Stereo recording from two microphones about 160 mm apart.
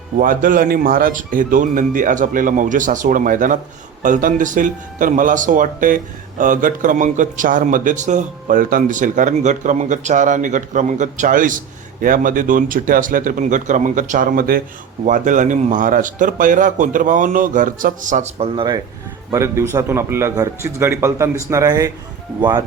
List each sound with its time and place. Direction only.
0.2 s a man's voice: 60° right (ahead or behind)
15.0 s a man's voice: 55° right (ahead or behind)
18.3 s speech: 30° right (ahead or behind)
19.3 s a man's voice: 20° right (ahead or behind)